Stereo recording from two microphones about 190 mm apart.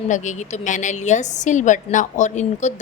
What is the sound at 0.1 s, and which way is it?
A woman's voice, 40° left (ahead or behind).